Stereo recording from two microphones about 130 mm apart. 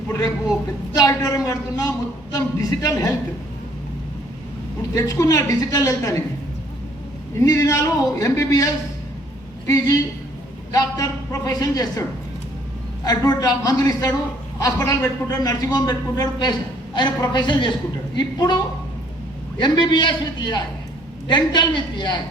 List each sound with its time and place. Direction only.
0.9 s a man's voice: 25° left (ahead or behind)
4.9 s a man's voice: 25° left (ahead or behind)
7.3 s a man's voice: 25° left (ahead or behind)
13.1 s a man's voice: 30° left (ahead or behind)